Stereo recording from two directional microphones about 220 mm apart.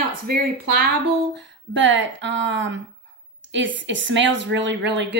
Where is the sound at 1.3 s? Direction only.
55° right (ahead or behind).